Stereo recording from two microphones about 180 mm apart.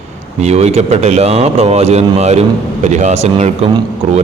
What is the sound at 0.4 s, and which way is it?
A man's voice, 35° right (ahead or behind).